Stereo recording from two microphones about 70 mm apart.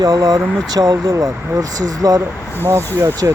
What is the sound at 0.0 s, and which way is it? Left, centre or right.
Speech, right.